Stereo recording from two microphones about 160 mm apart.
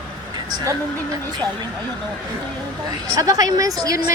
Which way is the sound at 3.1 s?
20° right (ahead or behind).